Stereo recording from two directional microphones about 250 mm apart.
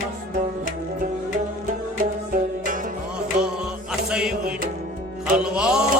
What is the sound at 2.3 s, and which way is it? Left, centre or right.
Music, right.